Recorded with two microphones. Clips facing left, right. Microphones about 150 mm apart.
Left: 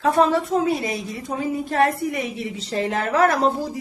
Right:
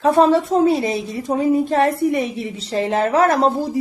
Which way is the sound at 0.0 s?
25° right (ahead or behind).